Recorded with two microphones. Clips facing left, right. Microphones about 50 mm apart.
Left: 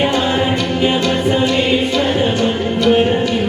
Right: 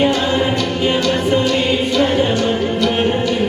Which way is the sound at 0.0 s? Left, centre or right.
Left.